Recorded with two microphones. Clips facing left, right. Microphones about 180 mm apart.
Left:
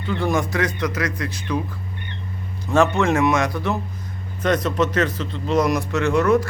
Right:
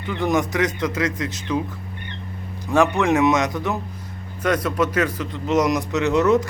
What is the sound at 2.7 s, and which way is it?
Speech, 15° right (ahead or behind).